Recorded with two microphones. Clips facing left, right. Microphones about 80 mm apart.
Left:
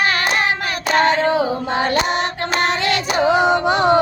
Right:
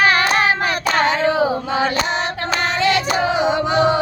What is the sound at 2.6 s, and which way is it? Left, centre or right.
Child singing, left.